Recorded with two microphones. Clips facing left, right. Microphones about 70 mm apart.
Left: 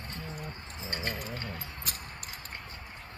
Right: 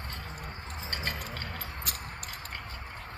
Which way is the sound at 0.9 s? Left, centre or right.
Right.